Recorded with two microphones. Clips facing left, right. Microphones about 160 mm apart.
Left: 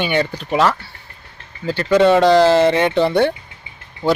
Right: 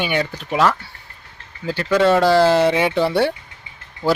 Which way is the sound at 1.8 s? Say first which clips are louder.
Left 3 dB; 20° left (ahead or behind).